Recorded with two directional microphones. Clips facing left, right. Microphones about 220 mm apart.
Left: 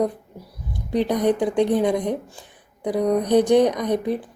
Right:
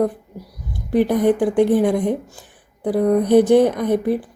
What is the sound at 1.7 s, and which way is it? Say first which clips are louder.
A woman's voice: right 3 dB; 5° right (ahead or behind).